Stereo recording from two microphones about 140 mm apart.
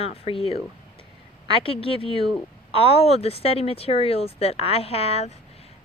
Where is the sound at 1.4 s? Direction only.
40° left (ahead or behind).